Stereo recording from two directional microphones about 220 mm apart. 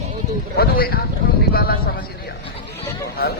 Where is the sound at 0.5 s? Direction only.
45° left (ahead or behind).